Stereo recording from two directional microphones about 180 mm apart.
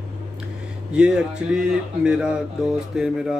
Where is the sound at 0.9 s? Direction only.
5° right (ahead or behind).